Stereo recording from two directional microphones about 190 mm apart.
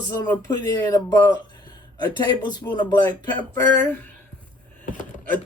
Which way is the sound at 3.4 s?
10° left (ahead or behind).